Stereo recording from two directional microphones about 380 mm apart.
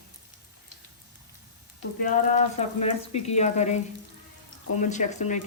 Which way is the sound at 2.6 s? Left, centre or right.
Centre.